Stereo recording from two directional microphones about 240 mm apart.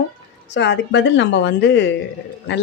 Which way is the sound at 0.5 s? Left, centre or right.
Left.